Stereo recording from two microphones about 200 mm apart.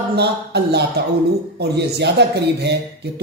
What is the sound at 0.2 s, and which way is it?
Speech, 55° right (ahead or behind).